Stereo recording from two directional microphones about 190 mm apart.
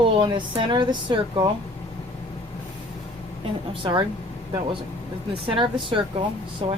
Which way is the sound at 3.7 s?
25° right (ahead or behind).